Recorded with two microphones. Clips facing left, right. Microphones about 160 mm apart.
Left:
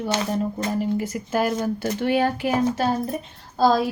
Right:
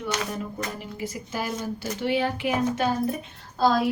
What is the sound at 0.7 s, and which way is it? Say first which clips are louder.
Speech: left 10 dB; 45° left (ahead or behind).